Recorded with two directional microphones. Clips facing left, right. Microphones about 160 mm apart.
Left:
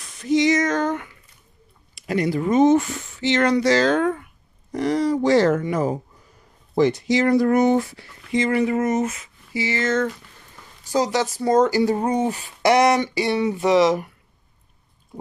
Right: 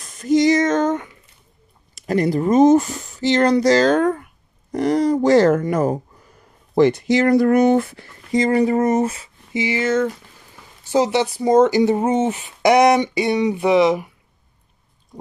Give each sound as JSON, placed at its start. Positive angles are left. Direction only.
{"t": 0.0, "sound": "female singing", "side_deg": -45}
{"t": 0.6, "sound": "speech", "side_deg": -20}
{"t": 2.0, "sound": "speech", "side_deg": -45}
{"t": 9.5, "sound": "speech", "side_deg": -15}
{"t": 10.9, "sound": "speech", "side_deg": -20}
{"t": 13.7, "sound": "speech", "side_deg": -5}